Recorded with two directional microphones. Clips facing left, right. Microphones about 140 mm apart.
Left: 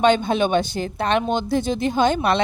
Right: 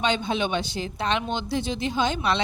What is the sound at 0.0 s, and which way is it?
Speech, 50° left (ahead or behind).